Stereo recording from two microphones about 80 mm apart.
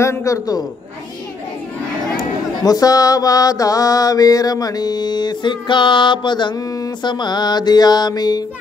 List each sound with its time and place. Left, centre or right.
0.0 s mantra: left
2.6 s mantra: left